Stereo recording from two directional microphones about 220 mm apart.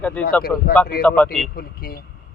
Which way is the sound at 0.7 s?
40° left (ahead or behind).